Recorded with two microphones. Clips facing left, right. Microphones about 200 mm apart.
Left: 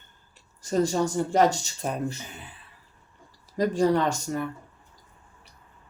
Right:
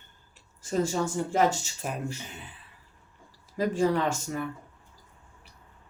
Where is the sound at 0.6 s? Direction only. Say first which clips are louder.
Left 3 dB; 40° left (ahead or behind).